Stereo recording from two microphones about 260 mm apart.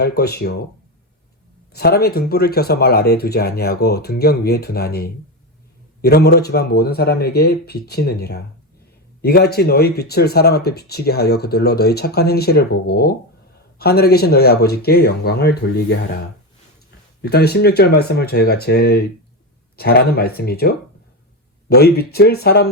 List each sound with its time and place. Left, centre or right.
0.0 s speech: left
1.7 s speech: left
17.2 s speech: left